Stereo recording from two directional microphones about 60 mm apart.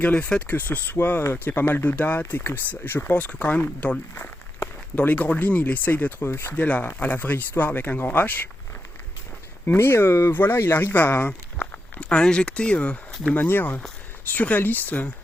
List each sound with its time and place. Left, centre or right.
0.0 s speech: left
3.2 s speech: left
4.9 s speech: left
6.7 s speech: left
9.7 s speech: left; by 13.0 s centre
13.3 s speech: left